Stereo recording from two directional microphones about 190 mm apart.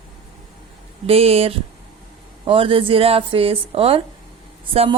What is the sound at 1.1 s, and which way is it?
A woman's voice, 30° right (ahead or behind).